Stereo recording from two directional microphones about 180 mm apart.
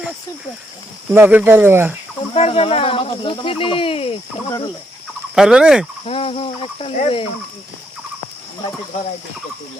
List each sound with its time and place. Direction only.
1.1 s speech: 10° right (ahead or behind)
2.3 s speech: 35° left (ahead or behind)
5.3 s fowl: 5° right (ahead or behind)
6.1 s speech: 35° left (ahead or behind)